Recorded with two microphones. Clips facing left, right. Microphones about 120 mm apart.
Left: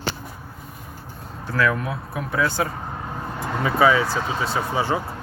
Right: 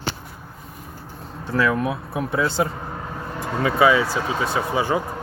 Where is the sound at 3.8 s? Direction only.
15° right (ahead or behind).